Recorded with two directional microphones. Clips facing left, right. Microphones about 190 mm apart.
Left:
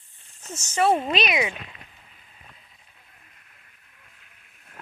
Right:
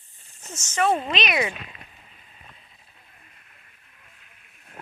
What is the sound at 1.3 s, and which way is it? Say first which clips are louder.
Speech: even; 10° left (ahead or behind).